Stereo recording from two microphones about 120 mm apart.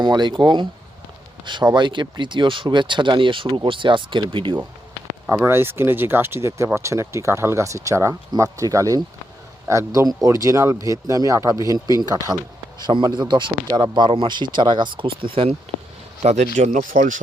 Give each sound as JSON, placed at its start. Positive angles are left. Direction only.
{"t": 0.0, "sound": "speech", "side_deg": -35}
{"t": 5.5, "sound": "speech", "side_deg": -20}
{"t": 16.2, "sound": "speech", "side_deg": -75}